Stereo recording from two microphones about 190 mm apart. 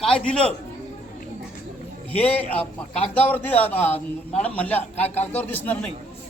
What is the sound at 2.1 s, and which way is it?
Speech, 5° left (ahead or behind).